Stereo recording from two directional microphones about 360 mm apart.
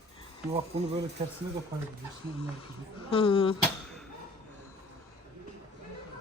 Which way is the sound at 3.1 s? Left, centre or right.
Centre.